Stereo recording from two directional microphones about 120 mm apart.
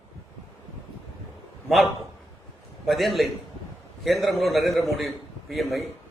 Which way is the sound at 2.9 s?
Centre (ahead or behind).